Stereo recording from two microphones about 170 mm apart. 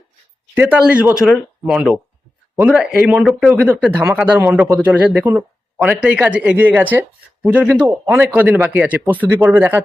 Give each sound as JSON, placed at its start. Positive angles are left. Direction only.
{"t": 0.5, "sound": "speech", "side_deg": -10}